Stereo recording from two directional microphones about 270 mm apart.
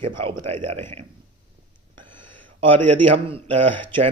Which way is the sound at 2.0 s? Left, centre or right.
Right.